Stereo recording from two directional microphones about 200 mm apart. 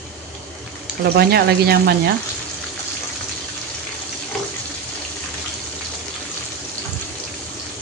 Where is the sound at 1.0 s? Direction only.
55° right (ahead or behind).